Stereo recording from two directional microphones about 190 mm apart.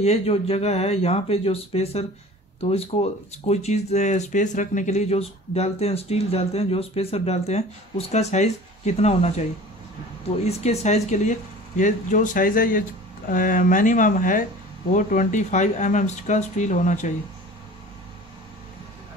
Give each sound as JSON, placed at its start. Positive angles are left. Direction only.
{"t": 0.0, "sound": "speech", "side_deg": 30}
{"t": 10.4, "sound": "speech", "side_deg": 35}